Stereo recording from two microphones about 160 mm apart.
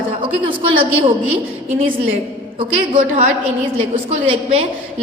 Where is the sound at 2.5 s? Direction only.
35° right (ahead or behind).